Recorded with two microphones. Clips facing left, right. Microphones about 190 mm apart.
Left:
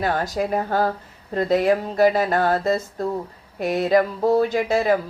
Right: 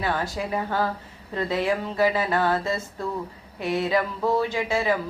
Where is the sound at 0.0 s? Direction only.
40° left (ahead or behind).